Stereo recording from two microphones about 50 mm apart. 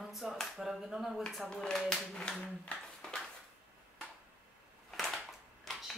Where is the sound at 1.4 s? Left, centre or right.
Centre.